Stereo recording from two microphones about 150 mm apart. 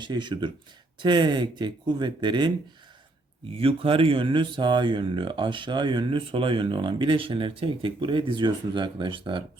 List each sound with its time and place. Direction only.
0.0 s speech: 30° right (ahead or behind)
3.5 s speech: 40° right (ahead or behind)